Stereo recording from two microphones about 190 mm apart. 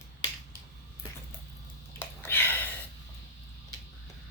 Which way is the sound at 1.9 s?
10° left (ahead or behind).